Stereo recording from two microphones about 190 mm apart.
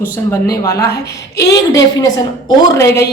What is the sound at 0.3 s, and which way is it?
A woman's voice, 15° left (ahead or behind).